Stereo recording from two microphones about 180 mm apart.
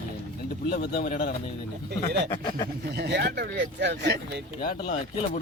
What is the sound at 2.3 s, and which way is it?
Speech, 25° left (ahead or behind).